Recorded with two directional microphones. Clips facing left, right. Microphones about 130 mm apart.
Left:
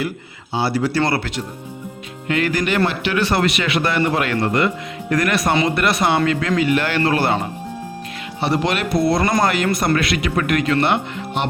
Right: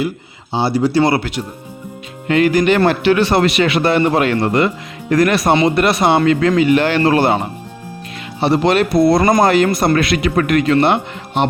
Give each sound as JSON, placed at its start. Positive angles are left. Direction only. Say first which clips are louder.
{"t": 0.5, "sound": "speech", "louder": "right 5 dB", "side_deg": -20}
{"t": 2.8, "sound": "speech", "louder": "right 8 dB", "side_deg": -40}
{"t": 3.2, "sound": "speech", "louder": "right 5 dB", "side_deg": -25}
{"t": 8.4, "sound": "speech", "louder": "right 6 dB", "side_deg": -30}